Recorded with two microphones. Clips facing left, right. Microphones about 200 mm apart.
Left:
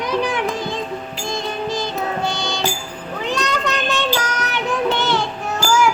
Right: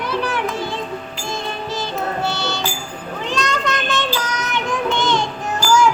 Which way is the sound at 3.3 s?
10° left (ahead or behind).